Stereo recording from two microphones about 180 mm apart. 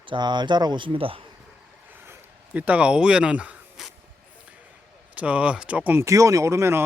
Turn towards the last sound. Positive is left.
turn(degrees=-15)  # may be behind; listen again after turning